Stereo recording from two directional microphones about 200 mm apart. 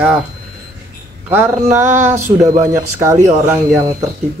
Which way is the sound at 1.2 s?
10° right (ahead or behind).